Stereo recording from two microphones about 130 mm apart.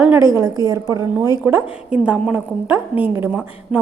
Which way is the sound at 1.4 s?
10° right (ahead or behind).